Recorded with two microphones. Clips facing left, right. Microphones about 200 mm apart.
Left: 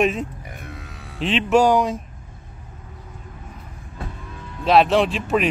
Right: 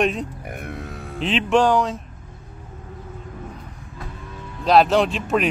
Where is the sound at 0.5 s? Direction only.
55° right (ahead or behind).